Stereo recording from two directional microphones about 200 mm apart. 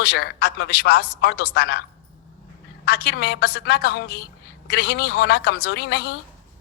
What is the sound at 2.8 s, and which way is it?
A woman's voice, 50° left (ahead or behind).